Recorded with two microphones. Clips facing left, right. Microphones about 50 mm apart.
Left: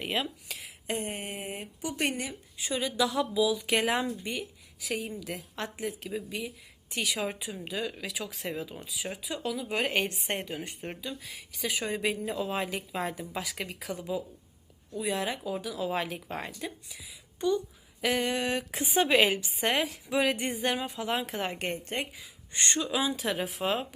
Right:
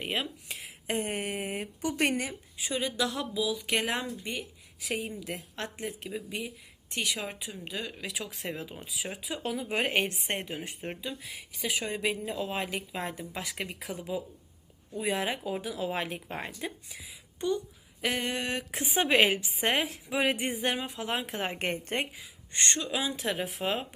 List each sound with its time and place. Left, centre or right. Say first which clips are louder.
0.0 s speech: left 1 dB; centre
0.9 s a woman's voice: right 2 dB; right
2.6 s a woman's voice: left 2 dB; centre
8.4 s speech: left 2 dB; centre
9.4 s a woman's voice: even; right
9.6 s a woman's voice: right 1 dB; right; by 14.1 s centre
15.5 s speech: left 1 dB; right
18.0 s a woman's voice: left 3 dB; centre
19.0 s speech: right 1 dB; centre
20.1 s speech: left 1 dB; centre
21.6 s a woman's voice: right 2 dB; right
22.5 s a woman's voice: left 1 dB; centre